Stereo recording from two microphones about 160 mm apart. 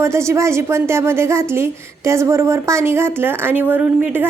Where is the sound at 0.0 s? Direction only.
15° right (ahead or behind).